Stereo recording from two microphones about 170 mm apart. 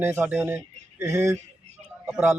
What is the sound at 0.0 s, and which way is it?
Speech, 15° right (ahead or behind).